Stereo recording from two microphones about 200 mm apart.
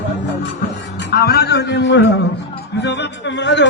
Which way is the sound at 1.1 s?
50° left (ahead or behind).